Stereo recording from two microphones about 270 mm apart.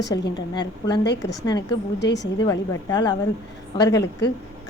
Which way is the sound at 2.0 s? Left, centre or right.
Left.